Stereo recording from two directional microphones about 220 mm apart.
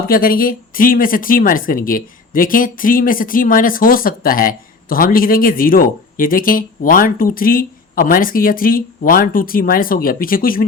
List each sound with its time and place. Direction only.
0.1 s speech: 40° left (ahead or behind)